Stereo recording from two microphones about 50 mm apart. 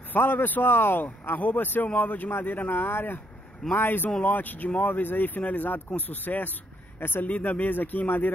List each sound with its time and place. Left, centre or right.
0.1 s speech: left
1.2 s speech: left
7.2 s speech: left